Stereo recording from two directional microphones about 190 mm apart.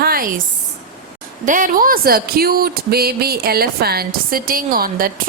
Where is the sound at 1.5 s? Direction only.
45° right (ahead or behind).